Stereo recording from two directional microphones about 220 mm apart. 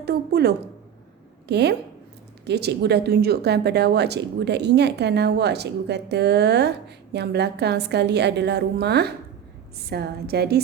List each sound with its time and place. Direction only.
0.0 s a woman's voice: 45° right (ahead or behind)